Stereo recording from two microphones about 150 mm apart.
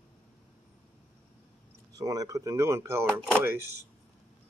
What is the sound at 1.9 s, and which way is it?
Speech, 25° right (ahead or behind).